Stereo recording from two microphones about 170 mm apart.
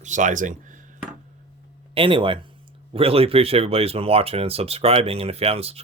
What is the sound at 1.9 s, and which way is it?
Speech, 30° right (ahead or behind).